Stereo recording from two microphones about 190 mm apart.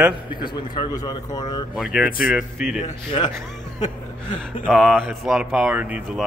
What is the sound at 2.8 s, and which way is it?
Speech, 25° left (ahead or behind).